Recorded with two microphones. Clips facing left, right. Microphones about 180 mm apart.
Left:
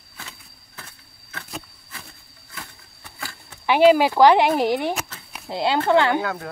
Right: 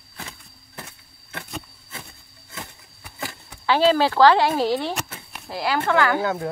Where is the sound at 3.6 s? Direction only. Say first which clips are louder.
Left 3 dB; 15° left (ahead or behind).